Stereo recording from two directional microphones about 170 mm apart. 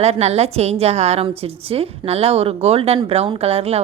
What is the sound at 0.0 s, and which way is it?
A woman's voice, 40° right (ahead or behind).